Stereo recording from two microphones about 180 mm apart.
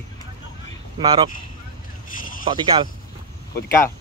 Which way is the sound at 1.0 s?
25° right (ahead or behind).